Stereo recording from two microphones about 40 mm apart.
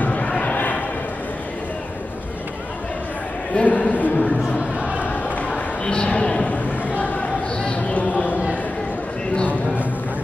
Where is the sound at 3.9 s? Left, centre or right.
Left.